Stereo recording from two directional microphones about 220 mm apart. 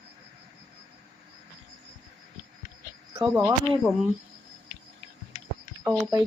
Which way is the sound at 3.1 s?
10° right (ahead or behind).